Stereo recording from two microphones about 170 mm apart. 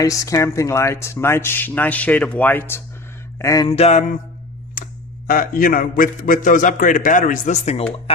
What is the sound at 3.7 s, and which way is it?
Speech, 40° left (ahead or behind).